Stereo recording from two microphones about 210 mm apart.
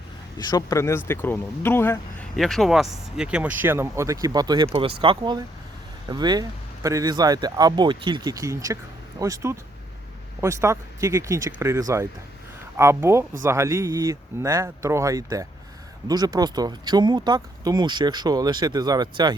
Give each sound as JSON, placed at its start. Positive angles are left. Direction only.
{"t": 0.3, "sound": "speech", "side_deg": 15}